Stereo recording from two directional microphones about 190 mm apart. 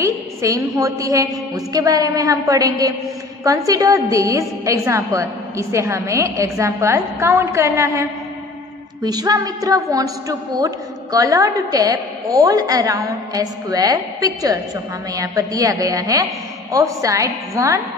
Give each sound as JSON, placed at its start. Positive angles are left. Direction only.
{"t": 0.0, "sound": "a woman's voice", "side_deg": -15}